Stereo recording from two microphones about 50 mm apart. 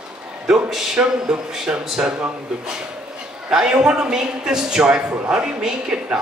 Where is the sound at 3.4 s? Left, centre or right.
Centre.